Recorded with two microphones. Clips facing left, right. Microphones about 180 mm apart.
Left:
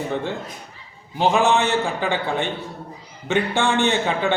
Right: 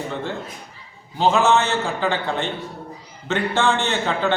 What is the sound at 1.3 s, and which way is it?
A man's voice, 15° left (ahead or behind).